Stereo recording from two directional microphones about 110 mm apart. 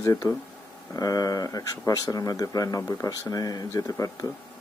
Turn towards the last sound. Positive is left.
turn(degrees=35)  # may be behind; listen again after turning